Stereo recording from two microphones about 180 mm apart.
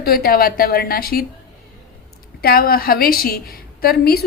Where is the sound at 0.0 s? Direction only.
55° left (ahead or behind).